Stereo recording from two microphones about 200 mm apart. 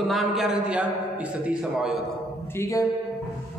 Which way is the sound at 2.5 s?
15° left (ahead or behind).